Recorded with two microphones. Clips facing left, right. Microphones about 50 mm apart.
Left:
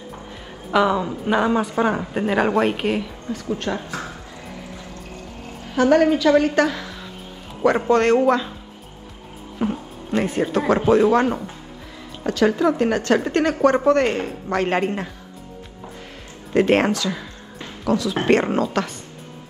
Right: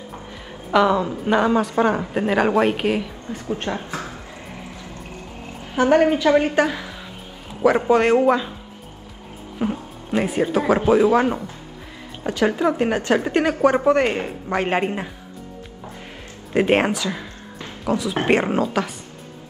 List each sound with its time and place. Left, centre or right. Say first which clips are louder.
0.7 s a woman's voice: right 1 dB; centre
3.3 s a woman's voice: even; right
5.8 s a woman's voice: even; right; by 8.5 s centre
9.6 s speech: even; centre
12.3 s a woman's voice: left 1 dB; centre
16.5 s a woman's voice: left 1 dB; centre
18.4 s a woman's voice: even; centre